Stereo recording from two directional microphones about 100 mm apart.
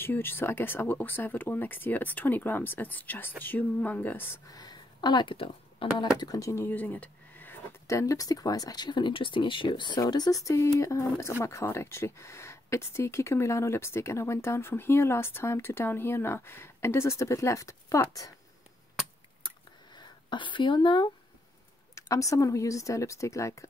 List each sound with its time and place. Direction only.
0.0 s speech: 20° left (ahead or behind)
4.5 s speech: 40° left (ahead or behind); by 6.0 s 60° left (ahead or behind)
6.1 s speech: 35° left (ahead or behind); by 7.5 s 15° left (ahead or behind)
7.8 s speech: 30° left (ahead or behind)
10.5 s speech: 30° left (ahead or behind)
19.4 s a sound: 50° left (ahead or behind)
21.9 s speech: 35° left (ahead or behind)